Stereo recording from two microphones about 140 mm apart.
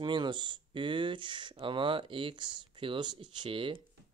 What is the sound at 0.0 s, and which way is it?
Speech, 35° right (ahead or behind).